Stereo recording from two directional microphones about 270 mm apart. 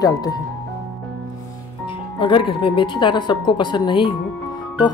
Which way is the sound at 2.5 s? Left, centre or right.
Centre.